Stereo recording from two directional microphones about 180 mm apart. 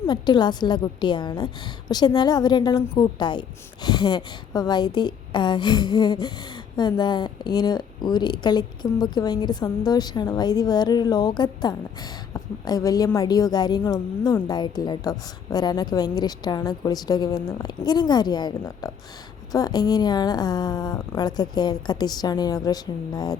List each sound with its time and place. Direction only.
0.1 s a woman's voice: 25° left (ahead or behind)